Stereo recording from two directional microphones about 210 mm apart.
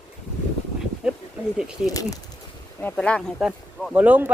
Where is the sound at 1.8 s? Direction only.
15° left (ahead or behind).